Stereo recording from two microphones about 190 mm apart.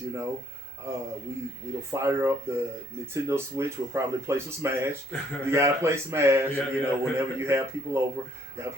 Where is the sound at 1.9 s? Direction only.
15° right (ahead or behind).